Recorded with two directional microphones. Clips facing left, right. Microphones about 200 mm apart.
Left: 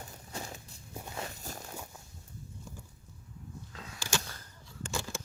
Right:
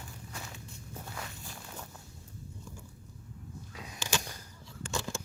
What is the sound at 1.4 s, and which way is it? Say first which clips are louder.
Walk: left 4 dB; 40° left (ahead or behind).